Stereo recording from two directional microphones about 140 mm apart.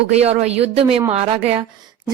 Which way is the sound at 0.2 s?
50° right (ahead or behind).